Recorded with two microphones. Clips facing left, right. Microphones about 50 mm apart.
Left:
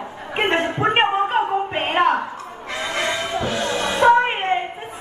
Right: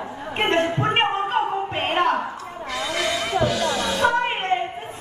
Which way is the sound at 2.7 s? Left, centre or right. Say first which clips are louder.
Left 1 dB; left.